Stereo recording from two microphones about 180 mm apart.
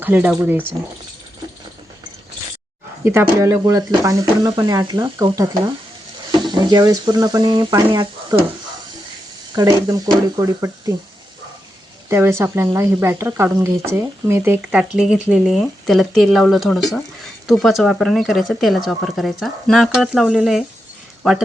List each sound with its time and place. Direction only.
0.0 s speech: 10° right (ahead or behind)
3.0 s speech: 15° right (ahead or behind)
9.6 s speech: 20° right (ahead or behind)
12.0 s speech: 15° right (ahead or behind)